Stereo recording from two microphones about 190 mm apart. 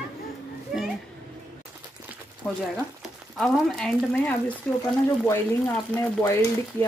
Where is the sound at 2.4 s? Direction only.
5° left (ahead or behind).